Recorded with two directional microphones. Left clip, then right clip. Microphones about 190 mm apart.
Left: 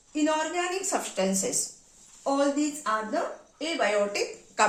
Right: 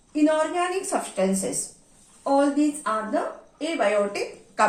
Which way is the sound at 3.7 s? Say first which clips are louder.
Right 3 dB; 25° left (ahead or behind).